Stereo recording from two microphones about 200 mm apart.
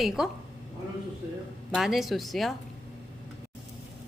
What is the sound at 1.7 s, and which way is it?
Speech, centre (ahead or behind).